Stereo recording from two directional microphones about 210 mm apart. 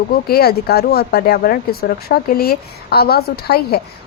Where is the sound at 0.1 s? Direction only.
50° left (ahead or behind).